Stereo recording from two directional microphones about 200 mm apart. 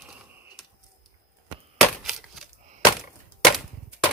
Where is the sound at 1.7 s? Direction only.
Centre (ahead or behind).